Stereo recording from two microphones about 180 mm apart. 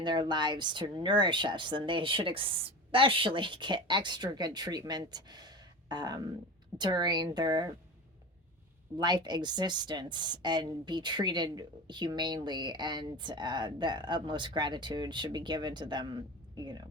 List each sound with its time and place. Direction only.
0.0 s a woman's voice: 25° right (ahead or behind)
9.0 s a woman's voice: 25° right (ahead or behind)